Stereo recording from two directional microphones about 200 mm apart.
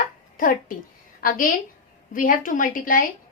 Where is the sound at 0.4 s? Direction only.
45° left (ahead or behind).